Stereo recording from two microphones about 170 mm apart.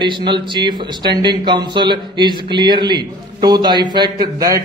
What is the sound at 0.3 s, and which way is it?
A man's voice, 25° right (ahead or behind).